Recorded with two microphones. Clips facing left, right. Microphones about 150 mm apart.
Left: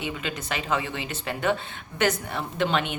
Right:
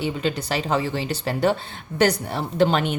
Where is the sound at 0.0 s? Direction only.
35° right (ahead or behind).